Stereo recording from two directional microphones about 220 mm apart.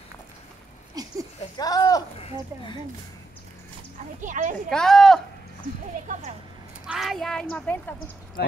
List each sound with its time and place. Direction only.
1.0 s a sound: 15° right (ahead or behind)
1.6 s speech: 15° left (ahead or behind)
4.2 s speech: 35° right (ahead or behind)
4.6 s speech: centre (ahead or behind)
6.9 s speech: centre (ahead or behind)
8.4 s speech: 50° left (ahead or behind)